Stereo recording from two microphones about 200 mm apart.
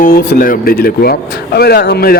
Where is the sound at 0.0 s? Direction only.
45° left (ahead or behind).